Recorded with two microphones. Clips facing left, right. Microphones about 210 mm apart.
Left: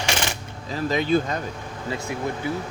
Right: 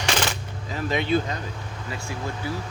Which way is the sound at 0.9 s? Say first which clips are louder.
Left 2 dB; 40° left (ahead or behind).